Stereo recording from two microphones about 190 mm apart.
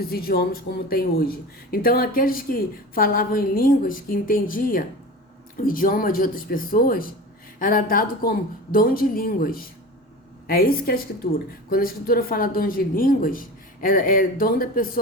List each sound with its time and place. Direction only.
0.0 s speech: 55° left (ahead or behind)